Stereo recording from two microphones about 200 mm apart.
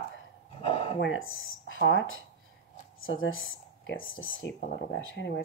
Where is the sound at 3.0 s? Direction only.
80° left.